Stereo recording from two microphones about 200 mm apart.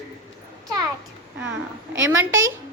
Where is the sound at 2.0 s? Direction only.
75° right (ahead or behind).